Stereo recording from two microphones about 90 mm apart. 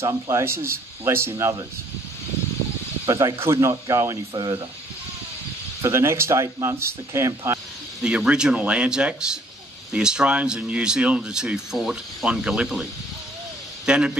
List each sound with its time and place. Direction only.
0.0 s speech: 30° right (ahead or behind)
3.1 s speech: 40° right (ahead or behind)
4.3 s speech: 50° right (ahead or behind)
5.8 s speech: 30° right (ahead or behind)
8.0 s speech: 10° right (ahead or behind)
13.8 s speech: 10° right (ahead or behind)